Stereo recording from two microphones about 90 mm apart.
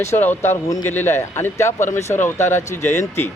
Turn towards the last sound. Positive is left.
turn(degrees=30)  # may be behind; listen again after turning